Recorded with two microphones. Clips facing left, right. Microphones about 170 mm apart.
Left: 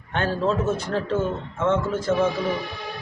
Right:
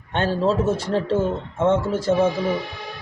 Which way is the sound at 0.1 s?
25° right (ahead or behind).